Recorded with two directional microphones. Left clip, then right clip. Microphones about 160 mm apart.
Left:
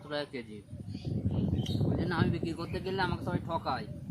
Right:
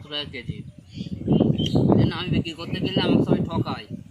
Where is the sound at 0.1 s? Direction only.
10° left (ahead or behind).